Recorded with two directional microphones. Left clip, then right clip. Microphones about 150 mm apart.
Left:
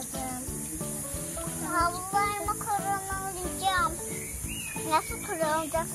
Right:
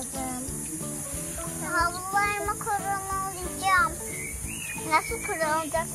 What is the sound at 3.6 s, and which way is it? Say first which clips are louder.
Music: right 4 dB; 15° right (ahead or behind).